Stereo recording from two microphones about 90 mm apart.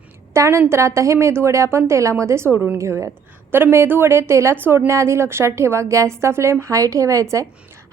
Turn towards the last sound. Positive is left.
turn(degrees=-35)  # may be behind; listen again after turning